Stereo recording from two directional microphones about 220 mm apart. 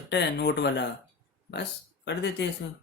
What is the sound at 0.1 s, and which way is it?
Speech, 50° left (ahead or behind).